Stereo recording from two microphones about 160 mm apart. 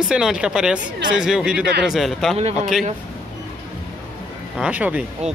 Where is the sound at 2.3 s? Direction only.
40° right (ahead or behind).